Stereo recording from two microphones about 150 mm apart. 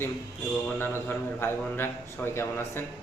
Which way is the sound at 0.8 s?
15° left (ahead or behind).